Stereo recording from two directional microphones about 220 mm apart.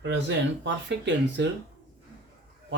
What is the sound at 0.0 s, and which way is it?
Speech, 55° right (ahead or behind).